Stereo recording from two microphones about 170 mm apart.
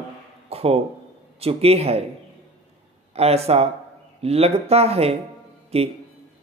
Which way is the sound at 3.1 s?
35° right (ahead or behind).